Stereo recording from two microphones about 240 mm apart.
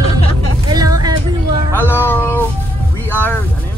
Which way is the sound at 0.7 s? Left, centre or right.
Centre.